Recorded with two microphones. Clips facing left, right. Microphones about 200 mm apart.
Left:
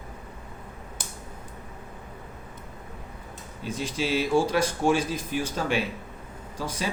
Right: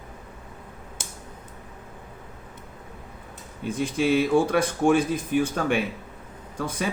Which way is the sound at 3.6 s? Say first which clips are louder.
Right 5 dB; 55° right (ahead or behind).